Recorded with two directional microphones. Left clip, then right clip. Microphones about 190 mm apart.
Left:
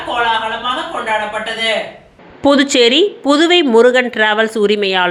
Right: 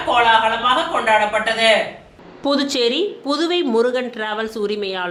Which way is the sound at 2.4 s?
25° left (ahead or behind).